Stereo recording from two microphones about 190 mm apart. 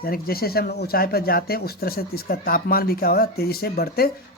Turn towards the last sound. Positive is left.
turn(degrees=55)  # may be behind; listen again after turning